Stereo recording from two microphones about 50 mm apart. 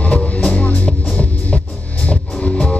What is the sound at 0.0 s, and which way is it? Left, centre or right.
Music, left.